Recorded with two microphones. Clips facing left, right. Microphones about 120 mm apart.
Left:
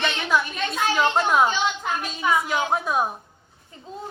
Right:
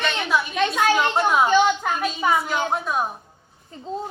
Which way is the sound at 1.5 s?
50° right (ahead or behind).